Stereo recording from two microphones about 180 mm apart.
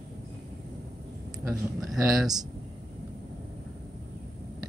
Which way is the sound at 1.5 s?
Centre (ahead or behind).